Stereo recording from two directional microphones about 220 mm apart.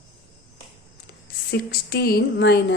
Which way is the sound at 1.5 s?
45° left (ahead or behind).